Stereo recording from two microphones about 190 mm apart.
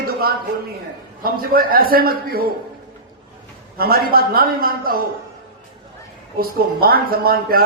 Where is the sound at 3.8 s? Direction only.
50° right (ahead or behind).